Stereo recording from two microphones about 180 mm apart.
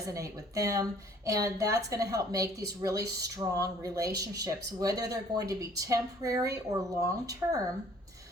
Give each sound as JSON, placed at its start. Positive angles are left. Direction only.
{"t": 0.1, "sound": "a woman's voice", "side_deg": -20}